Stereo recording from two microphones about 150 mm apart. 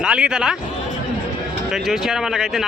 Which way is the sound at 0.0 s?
5° right (ahead or behind).